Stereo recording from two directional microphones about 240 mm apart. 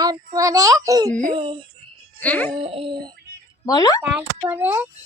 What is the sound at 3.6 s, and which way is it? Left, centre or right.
Music, centre.